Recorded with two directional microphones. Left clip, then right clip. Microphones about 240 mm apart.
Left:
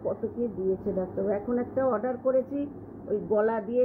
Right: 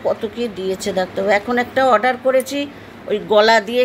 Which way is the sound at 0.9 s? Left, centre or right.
Right.